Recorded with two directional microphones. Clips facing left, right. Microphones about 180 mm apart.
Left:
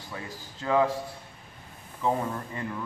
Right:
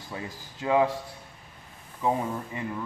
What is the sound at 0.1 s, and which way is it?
Speech, 15° right (ahead or behind).